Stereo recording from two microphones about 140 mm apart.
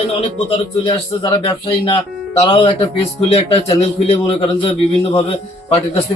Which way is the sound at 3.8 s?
50° left (ahead or behind).